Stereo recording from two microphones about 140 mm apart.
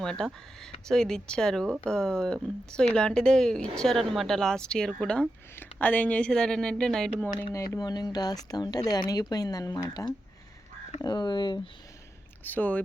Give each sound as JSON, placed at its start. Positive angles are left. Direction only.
{"t": 0.0, "sound": "speech", "side_deg": 5}
{"t": 7.3, "sound": "speech", "side_deg": 20}
{"t": 12.4, "sound": "speech", "side_deg": 10}